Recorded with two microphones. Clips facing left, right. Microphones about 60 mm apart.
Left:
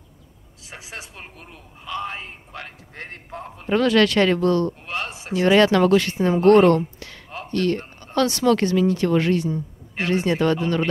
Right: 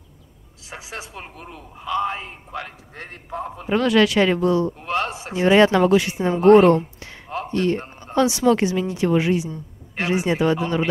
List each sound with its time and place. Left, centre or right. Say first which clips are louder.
0.7 s a woman's voice: right 3 dB; centre
1.1 s a man's voice: right 4 dB; centre
3.3 s a woman's voice: right 9 dB; centre
3.5 s a man's voice: even; centre
5.1 s a woman's voice: even; centre
7.2 s a sound: right 1 dB; centre
7.8 s a woman's voice: right 2 dB; centre